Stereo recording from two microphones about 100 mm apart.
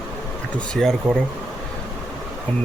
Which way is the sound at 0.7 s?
5° left (ahead or behind).